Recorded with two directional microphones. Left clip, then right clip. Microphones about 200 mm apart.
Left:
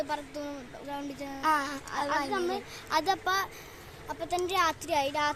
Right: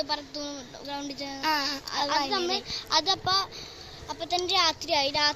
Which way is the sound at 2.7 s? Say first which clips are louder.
Right 2 dB; 30° left (ahead or behind).